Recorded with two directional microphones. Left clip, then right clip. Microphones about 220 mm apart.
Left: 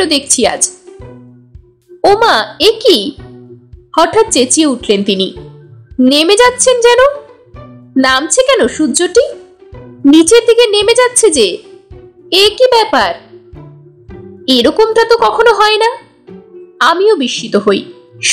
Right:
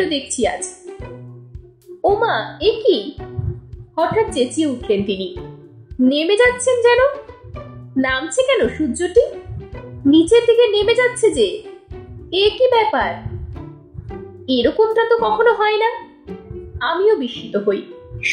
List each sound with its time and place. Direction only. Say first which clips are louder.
0.0 s a woman's voice: left 8 dB; 30° left (ahead or behind)
2.0 s a woman's voice: left 8 dB; 30° left (ahead or behind)
14.5 s a woman's voice: left 7 dB; 30° left (ahead or behind)